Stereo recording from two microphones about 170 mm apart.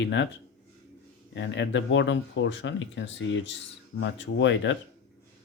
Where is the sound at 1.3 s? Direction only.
90° left.